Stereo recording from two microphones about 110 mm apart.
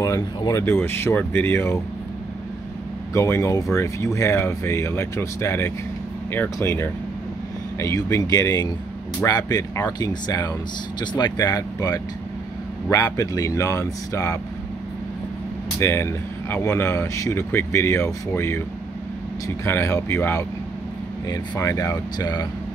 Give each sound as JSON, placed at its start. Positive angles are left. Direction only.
{"t": 0.4, "sound": "speech", "side_deg": 30}
{"t": 3.1, "sound": "speech", "side_deg": 25}
{"t": 15.8, "sound": "speech", "side_deg": 25}